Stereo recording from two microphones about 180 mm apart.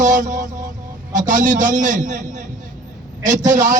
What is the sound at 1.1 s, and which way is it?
A man's voice, 45° right (ahead or behind).